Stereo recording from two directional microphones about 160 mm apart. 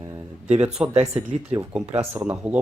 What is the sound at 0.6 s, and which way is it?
Speech, 5° right (ahead or behind).